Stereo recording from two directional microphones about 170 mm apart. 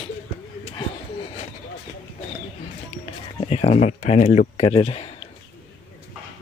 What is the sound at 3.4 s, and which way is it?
Speech, 40° left (ahead or behind).